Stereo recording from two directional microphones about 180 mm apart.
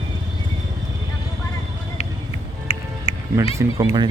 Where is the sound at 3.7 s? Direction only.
25° right (ahead or behind).